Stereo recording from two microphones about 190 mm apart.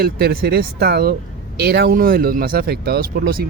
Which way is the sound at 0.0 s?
55° right (ahead or behind).